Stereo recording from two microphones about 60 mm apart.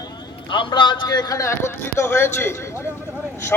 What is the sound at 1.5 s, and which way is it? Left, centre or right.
Speech, left.